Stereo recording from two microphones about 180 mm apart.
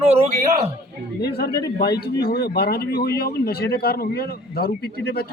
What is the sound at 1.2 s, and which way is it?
Speech, 60° left (ahead or behind).